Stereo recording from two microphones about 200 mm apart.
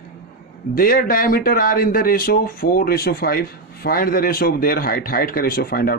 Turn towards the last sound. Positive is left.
turn(degrees=50)  # may be behind; listen again after turning